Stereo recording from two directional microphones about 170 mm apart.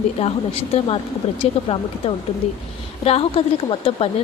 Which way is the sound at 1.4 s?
30° left (ahead or behind).